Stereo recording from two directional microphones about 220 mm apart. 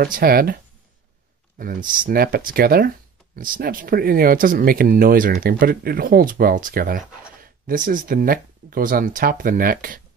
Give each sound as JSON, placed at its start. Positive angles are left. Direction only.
{"t": 0.0, "sound": "speech", "side_deg": -40}
{"t": 1.6, "sound": "speech", "side_deg": -40}